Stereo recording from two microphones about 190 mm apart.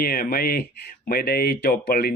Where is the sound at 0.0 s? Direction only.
50° left (ahead or behind).